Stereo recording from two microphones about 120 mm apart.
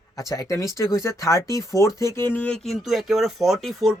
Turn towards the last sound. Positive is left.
turn(degrees=0)  # may be behind; listen again after turning